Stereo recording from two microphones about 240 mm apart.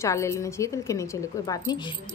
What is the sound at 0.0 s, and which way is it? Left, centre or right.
A woman's voice, centre.